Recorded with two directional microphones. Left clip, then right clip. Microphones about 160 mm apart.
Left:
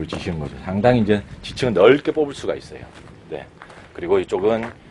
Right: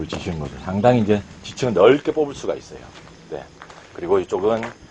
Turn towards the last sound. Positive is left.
turn(degrees=0)  # may be behind; listen again after turning